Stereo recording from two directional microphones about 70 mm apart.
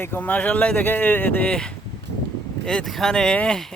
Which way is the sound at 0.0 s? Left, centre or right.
Left.